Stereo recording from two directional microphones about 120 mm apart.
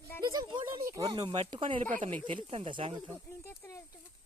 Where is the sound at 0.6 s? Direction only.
25° right (ahead or behind).